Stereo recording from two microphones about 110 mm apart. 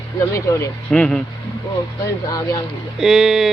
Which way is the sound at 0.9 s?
5° left (ahead or behind).